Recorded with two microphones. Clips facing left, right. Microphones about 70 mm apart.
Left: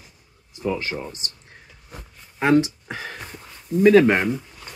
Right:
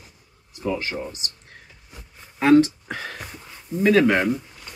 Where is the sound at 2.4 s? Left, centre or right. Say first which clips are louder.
Right 3 dB; left.